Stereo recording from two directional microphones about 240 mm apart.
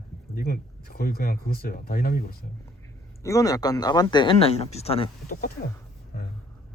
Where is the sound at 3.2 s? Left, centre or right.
Centre.